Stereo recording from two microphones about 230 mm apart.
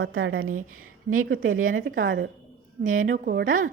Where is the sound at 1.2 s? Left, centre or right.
Right.